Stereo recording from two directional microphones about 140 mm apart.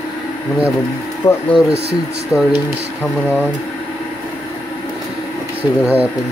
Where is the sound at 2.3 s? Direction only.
5° right (ahead or behind).